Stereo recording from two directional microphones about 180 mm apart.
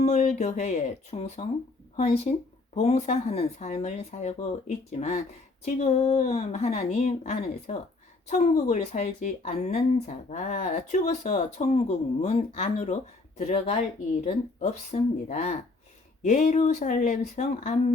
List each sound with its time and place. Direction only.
0.0 s speech: 40° left (ahead or behind)